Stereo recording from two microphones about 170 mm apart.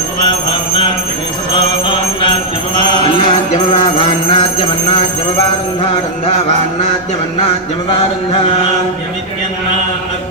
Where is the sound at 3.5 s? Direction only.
35° left (ahead or behind).